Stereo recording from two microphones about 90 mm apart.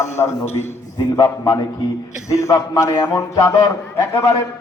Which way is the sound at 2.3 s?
35° left (ahead or behind).